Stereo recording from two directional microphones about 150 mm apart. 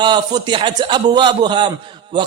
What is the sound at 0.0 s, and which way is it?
A man's voice, 30° right (ahead or behind).